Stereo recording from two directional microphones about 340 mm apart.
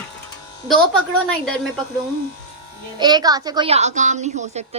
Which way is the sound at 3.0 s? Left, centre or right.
Centre.